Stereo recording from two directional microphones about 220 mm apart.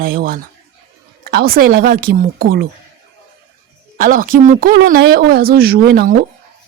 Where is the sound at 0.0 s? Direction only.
40° right (ahead or behind).